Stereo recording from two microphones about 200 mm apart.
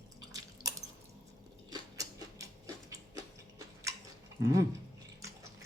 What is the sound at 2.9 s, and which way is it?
Tick-tock, 15° right (ahead or behind).